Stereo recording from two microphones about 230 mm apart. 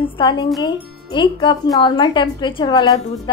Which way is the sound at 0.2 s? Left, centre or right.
Centre.